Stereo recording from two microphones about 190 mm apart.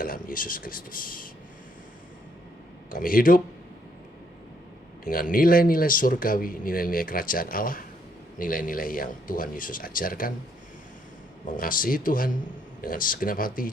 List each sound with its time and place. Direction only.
0.0 s speech: 50° left (ahead or behind)
2.9 s speech: 50° left (ahead or behind)
5.0 s speech: 45° left (ahead or behind)
11.4 s speech: 45° left (ahead or behind)